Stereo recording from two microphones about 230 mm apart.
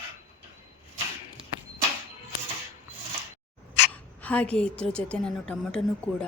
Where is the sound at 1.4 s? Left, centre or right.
Right.